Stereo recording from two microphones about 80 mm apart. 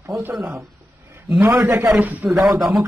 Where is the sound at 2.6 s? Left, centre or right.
Centre.